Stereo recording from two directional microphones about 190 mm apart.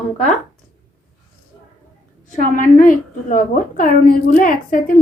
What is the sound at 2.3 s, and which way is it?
A woman's voice, 45° left (ahead or behind).